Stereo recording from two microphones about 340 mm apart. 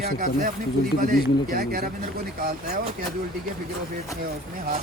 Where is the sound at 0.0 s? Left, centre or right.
Right.